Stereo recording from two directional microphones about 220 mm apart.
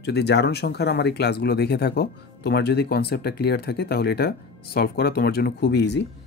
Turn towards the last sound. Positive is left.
turn(degrees=50)  # may be behind; listen again after turning